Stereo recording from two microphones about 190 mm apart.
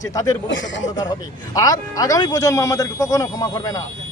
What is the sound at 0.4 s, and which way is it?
Speech, 75° left (ahead or behind).